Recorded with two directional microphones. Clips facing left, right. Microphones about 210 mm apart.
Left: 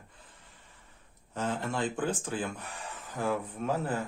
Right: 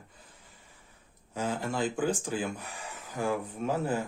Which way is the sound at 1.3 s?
5° right (ahead or behind).